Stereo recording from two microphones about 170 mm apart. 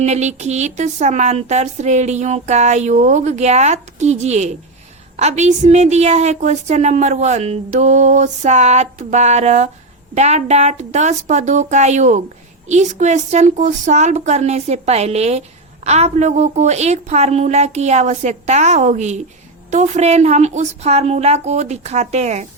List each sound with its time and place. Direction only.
0.0 s a woman's voice: 40° right (ahead or behind)